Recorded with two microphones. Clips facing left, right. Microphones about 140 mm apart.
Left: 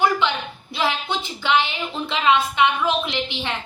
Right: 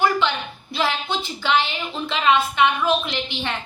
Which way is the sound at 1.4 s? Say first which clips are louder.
Left 1 dB; 15° left (ahead or behind).